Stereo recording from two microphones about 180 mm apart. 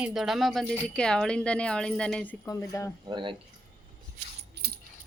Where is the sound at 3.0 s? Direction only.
25° right (ahead or behind).